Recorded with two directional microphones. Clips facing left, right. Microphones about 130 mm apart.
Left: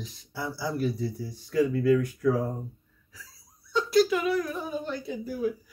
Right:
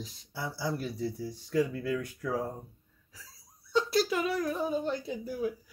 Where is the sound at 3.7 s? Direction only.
35° right (ahead or behind).